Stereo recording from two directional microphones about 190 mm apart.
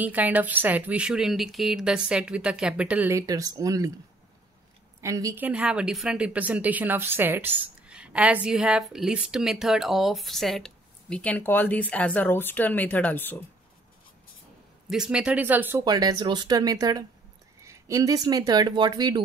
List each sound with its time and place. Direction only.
0.0 s a woman's voice: 10° right (ahead or behind)
5.0 s a woman's voice: 15° right (ahead or behind); by 13.4 s 10° left (ahead or behind)
14.9 s a woman's voice: 5° right (ahead or behind); by 19.2 s 20° right (ahead or behind)